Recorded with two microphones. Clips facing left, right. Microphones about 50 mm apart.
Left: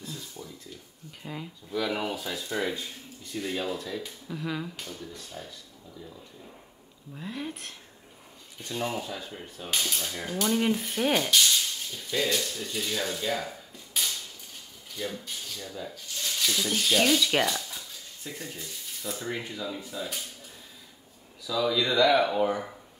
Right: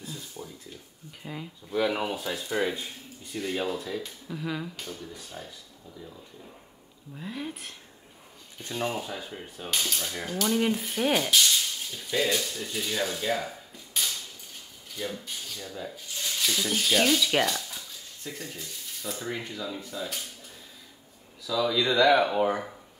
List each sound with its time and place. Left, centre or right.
0.4 s a sound: centre
1.2 s speech: centre
1.9 s speech: centre
3.3 s speech: centre
7.2 s speech: centre
8.7 s speech: centre
9.7 s rub: centre
15.0 s speech: centre
15.9 s speech: centre
16.3 s speech: centre
21.5 s speech: centre
21.9 s speech: centre